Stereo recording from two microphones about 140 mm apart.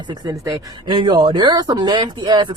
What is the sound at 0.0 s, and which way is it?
Speech, 30° right (ahead or behind).